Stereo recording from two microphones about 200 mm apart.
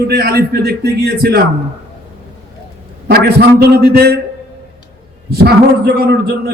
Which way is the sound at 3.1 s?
55° right (ahead or behind).